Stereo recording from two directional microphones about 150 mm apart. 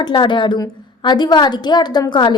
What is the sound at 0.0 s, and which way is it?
A woman's voice, 30° left (ahead or behind).